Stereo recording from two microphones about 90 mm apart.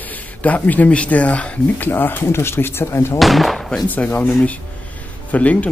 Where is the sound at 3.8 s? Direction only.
20° left (ahead or behind).